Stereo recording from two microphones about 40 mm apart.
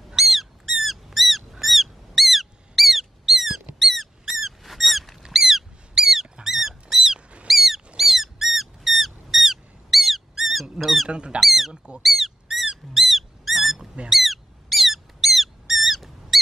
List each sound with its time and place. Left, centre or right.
0.1 s a sound: centre
3.8 s squeak: centre
5.2 s a sound: centre
6.4 s dog: centre
7.4 s mouse: centre
8.0 s squeak: centre
10.8 s speech: centre
11.1 s speech: right
11.3 s speech: centre
11.7 s speech: centre
12.0 s a sound: centre